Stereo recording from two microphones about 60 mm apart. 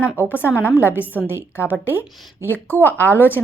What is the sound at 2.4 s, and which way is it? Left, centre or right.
Speech, left.